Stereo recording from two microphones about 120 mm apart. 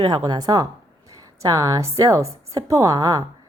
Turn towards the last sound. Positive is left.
turn(degrees=-30)  # may be behind; listen again after turning